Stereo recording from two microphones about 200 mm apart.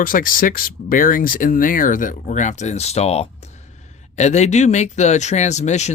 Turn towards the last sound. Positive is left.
turn(degrees=35)  # may be behind; listen again after turning